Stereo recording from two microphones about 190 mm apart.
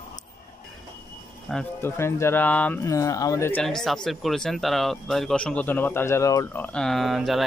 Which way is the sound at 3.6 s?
5° left (ahead or behind).